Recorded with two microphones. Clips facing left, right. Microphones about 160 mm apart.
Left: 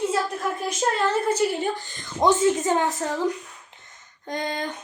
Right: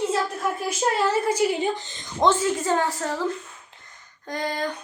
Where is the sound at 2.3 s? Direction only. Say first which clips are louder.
Left 3 dB; 20° left (ahead or behind).